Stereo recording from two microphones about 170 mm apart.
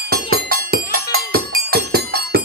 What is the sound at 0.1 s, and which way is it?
Music, 60° right (ahead or behind).